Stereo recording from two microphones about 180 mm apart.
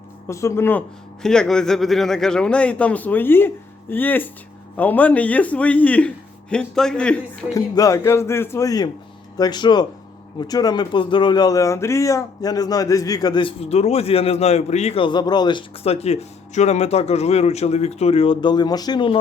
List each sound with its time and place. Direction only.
0.3 s a man's voice: 15° left (ahead or behind)
7.5 s a man's voice: 20° left (ahead or behind)